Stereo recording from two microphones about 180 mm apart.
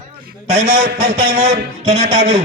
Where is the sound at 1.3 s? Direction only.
35° right (ahead or behind).